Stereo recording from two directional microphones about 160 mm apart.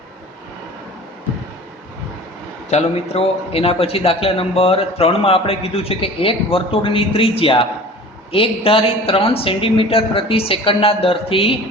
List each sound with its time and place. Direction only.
2.6 s a man's voice: 40° left (ahead or behind)